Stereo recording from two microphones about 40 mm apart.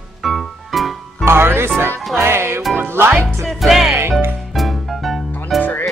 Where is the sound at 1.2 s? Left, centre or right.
Right.